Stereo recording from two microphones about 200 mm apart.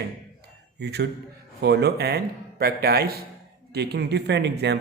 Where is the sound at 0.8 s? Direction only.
55° right (ahead or behind).